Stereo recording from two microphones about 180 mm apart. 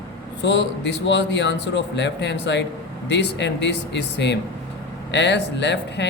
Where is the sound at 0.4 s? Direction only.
80° left.